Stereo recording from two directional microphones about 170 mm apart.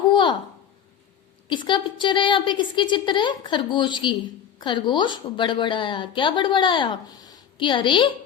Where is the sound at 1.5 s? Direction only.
30° left (ahead or behind).